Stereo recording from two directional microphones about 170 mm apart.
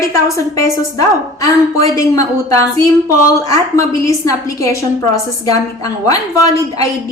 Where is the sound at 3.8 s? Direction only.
20° left (ahead or behind).